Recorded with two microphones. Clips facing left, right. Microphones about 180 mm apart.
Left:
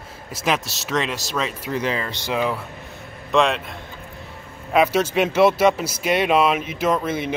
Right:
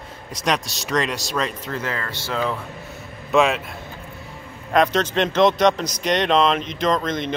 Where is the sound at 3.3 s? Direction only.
5° right (ahead or behind).